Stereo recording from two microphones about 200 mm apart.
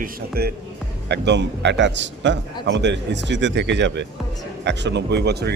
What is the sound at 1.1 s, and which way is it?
Speech, 60° right (ahead or behind).